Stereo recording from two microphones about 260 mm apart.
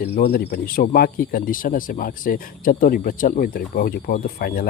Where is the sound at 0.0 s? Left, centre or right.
Left.